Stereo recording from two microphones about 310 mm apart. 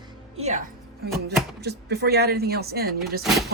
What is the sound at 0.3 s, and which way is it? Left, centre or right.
Music, right.